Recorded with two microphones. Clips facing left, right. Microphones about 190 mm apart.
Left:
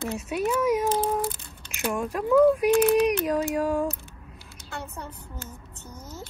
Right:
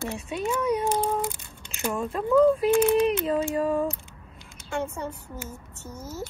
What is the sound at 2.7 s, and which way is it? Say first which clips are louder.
Speech: left 1 dB; 15° right (ahead or behind).